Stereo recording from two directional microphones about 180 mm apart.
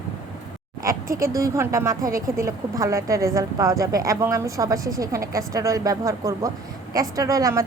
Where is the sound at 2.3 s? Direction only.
15° right (ahead or behind).